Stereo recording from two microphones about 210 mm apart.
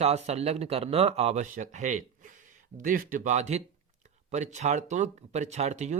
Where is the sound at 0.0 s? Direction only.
30° right (ahead or behind).